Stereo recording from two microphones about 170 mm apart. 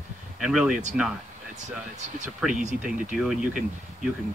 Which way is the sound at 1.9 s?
45° right (ahead or behind).